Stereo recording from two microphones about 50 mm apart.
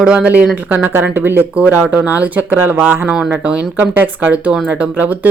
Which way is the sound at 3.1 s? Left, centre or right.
Right.